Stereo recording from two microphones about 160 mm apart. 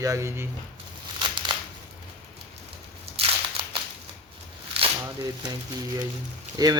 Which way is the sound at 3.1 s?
35° right (ahead or behind).